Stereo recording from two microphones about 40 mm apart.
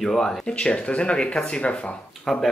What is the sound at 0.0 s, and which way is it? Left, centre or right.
Speech, centre.